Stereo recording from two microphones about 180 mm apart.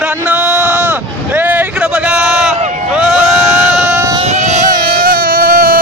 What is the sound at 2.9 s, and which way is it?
Crowd, 5° right (ahead or behind).